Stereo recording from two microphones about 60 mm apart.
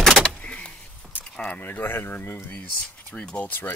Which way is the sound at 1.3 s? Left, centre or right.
Left.